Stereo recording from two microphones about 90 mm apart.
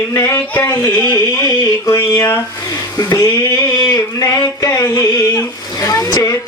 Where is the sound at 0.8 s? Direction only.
50° left (ahead or behind).